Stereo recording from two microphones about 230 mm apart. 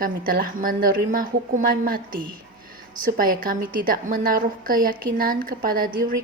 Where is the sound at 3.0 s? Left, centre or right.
Right.